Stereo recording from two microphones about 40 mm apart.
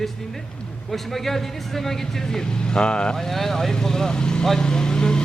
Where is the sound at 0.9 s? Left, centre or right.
Centre; by 3.1 s left.